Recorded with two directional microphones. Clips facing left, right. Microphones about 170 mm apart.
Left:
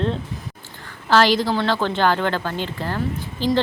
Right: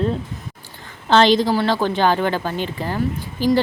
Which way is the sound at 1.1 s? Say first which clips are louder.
Right 3 dB; 20° right (ahead or behind).